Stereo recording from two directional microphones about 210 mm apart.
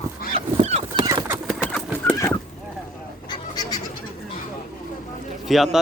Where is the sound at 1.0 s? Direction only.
15° right (ahead or behind).